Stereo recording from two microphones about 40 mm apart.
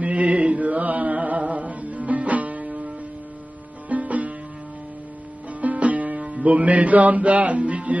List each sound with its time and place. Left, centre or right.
0.0 s mantra: right
1.4 s music: right
3.9 s music: right
5.5 s music: right